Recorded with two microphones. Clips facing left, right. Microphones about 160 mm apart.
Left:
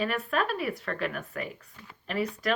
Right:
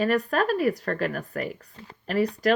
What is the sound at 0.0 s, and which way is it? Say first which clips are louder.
A woman's voice: right 6 dB; 40° right (ahead or behind).